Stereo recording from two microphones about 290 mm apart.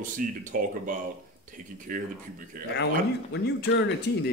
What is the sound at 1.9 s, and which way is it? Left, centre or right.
Speech, right.